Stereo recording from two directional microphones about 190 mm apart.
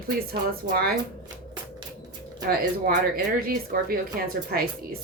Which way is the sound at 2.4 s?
45° right (ahead or behind).